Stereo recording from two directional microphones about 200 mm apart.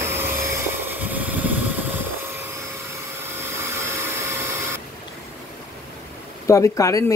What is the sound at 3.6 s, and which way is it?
Vacuum cleaner, 15° right (ahead or behind).